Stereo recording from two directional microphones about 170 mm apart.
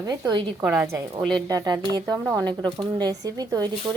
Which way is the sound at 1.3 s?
25° right (ahead or behind).